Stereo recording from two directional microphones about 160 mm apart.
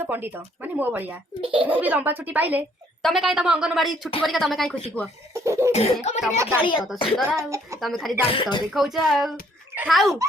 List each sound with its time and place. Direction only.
0.0 s speech: 10° right (ahead or behind)
1.4 s a child's voice: 35° right (ahead or behind)
1.6 s speech: 10° right (ahead or behind)
5.3 s cough: 15° right (ahead or behind)
5.7 s speech: 45° left (ahead or behind)
6.3 s speech: 15° right (ahead or behind)
6.7 s speech: centre (ahead or behind)
7.3 s speech: 20° right (ahead or behind)
7.8 s speech: centre (ahead or behind)
8.3 s speech: 30° left (ahead or behind)
8.7 s speech: centre (ahead or behind)